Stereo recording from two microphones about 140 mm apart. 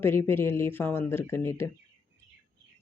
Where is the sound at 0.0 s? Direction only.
15° left (ahead or behind).